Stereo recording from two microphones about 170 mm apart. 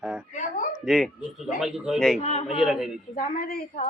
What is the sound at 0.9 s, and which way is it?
Speech, centre (ahead or behind).